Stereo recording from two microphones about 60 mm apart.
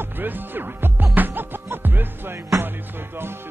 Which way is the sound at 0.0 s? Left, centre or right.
Right.